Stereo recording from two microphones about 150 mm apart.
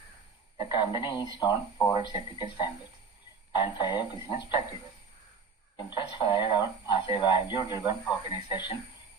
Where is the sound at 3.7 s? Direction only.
30° left (ahead or behind).